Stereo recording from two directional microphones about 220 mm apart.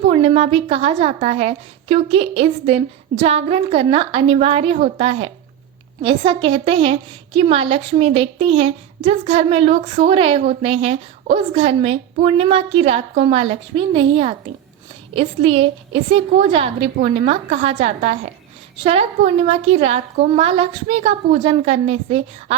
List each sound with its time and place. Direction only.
0.0 s a woman's voice: 30° right (ahead or behind)